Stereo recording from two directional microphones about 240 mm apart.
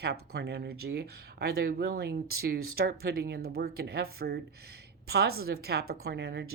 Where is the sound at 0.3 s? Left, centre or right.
Right.